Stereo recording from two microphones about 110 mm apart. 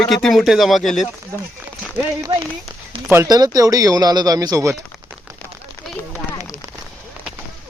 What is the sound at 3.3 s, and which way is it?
Speech, 35° right (ahead or behind).